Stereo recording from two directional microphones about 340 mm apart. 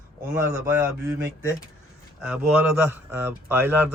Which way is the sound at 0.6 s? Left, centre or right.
Centre.